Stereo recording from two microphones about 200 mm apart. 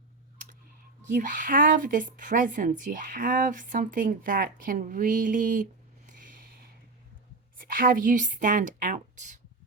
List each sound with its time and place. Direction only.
1.1 s a woman's voice: 40° right (ahead or behind)
6.1 s a sound: 40° right (ahead or behind)
7.6 s a woman's voice: 45° right (ahead or behind)